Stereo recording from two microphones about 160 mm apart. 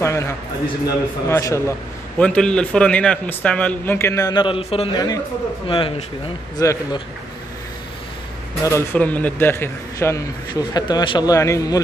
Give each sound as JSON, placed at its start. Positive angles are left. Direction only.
{"t": 0.0, "sound": "a man's voice", "side_deg": 15}
{"t": 6.5, "sound": "a man's voice", "side_deg": 25}
{"t": 8.6, "sound": "a man's voice", "side_deg": 15}